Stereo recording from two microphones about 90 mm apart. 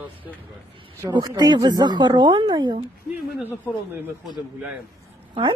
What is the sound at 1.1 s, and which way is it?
Speech, 45° right (ahead or behind).